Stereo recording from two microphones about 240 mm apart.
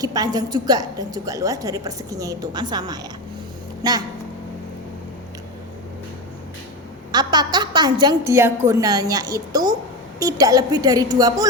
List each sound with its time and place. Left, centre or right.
0.0 s a woman's voice: centre
7.1 s a woman's voice: centre